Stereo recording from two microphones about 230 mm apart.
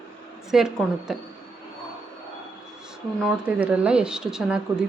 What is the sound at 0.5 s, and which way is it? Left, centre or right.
Speech, centre.